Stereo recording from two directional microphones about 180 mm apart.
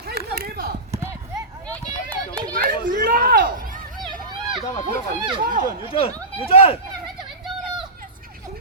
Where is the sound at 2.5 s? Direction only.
50° right (ahead or behind).